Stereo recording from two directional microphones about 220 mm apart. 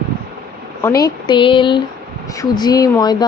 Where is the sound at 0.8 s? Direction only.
15° left (ahead or behind).